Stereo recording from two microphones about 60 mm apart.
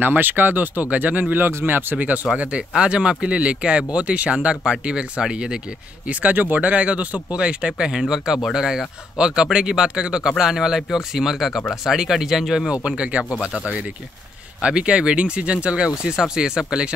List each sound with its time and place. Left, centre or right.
0.0 s speech: right; by 5.6 s centre
6.0 s speech: right
13.2 s speech: centre
14.6 s speech: centre